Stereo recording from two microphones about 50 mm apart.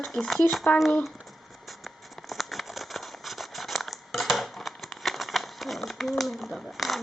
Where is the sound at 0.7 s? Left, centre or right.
Left.